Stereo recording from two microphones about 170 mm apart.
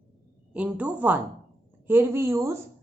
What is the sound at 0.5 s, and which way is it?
A woman's voice, 10° right (ahead or behind).